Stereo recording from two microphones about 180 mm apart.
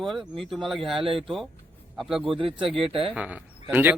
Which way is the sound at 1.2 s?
Centre (ahead or behind).